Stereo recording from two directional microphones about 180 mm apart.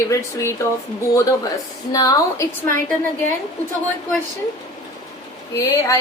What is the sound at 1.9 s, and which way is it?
Speech, 20° left (ahead or behind).